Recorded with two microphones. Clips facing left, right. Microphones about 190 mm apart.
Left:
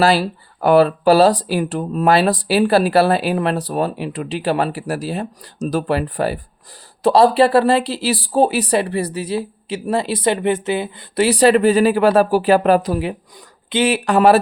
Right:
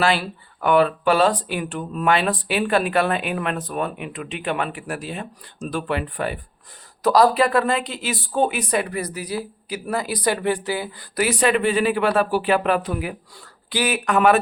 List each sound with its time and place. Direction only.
0.0 s speech: 40° left (ahead or behind)